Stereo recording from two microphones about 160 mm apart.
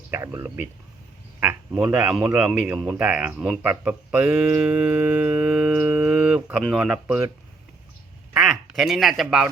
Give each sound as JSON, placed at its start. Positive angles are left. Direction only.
{"t": 0.1, "sound": "a man's voice", "side_deg": -15}
{"t": 8.3, "sound": "quack", "side_deg": -5}